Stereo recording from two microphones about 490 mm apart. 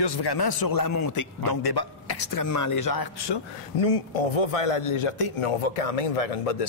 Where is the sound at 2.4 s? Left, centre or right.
Left.